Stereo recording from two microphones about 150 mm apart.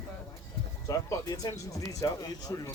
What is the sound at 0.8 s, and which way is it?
Speech, 25° left (ahead or behind).